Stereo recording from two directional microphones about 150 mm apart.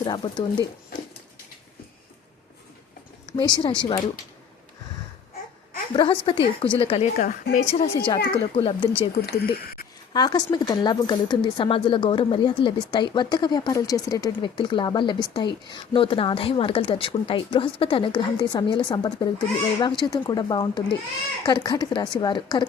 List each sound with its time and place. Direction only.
0.0 s speech: 30° left (ahead or behind)
3.2 s a woman's voice: 30° left (ahead or behind)
5.9 s speech: 35° left (ahead or behind)
7.2 s a woman's voice: 65° left (ahead or behind)
7.6 s speech: 50° left (ahead or behind)
7.9 s speech: 35° left (ahead or behind)
9.1 s speech: 90° left
10.1 s speech: 30° left (ahead or behind)